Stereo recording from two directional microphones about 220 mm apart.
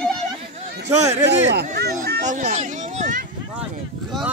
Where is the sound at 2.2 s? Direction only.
35° right (ahead or behind).